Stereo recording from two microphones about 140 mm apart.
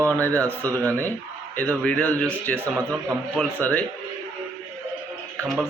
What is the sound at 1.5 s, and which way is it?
Speech, 10° left (ahead or behind).